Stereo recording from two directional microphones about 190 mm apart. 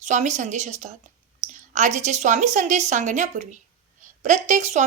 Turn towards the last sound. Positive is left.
turn(degrees=-40)  # may be behind; listen again after turning